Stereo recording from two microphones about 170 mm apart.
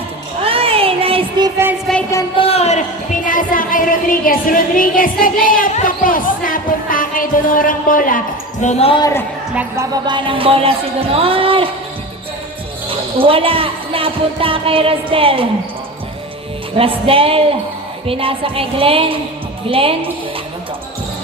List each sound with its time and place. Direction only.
0.4 s child singing: 35° right (ahead or behind)
1.9 s a sound: centre (ahead or behind)
2.4 s speech: 35° left (ahead or behind)
3.2 s music: 55° left (ahead or behind)
8.6 s speech: 35° left (ahead or behind)
9.0 s a woman's voice: 20° left (ahead or behind)
9.6 s a woman's voice: 15° right (ahead or behind)
10.1 s speech: 30° right (ahead or behind)
12.9 s speech: 30° right (ahead or behind)
16.7 s speech: 35° right (ahead or behind)